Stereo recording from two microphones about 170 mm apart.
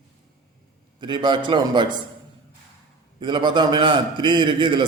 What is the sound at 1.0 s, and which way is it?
Speech, 25° right (ahead or behind).